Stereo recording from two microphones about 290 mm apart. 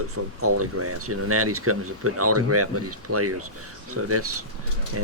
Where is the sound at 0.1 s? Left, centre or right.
Right.